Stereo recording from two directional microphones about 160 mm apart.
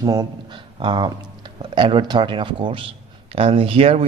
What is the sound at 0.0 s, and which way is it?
Speech, 20° right (ahead or behind).